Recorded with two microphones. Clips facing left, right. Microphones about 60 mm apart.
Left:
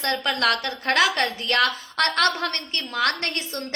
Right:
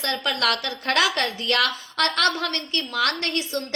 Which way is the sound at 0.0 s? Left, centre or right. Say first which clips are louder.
Left 1 dB; left.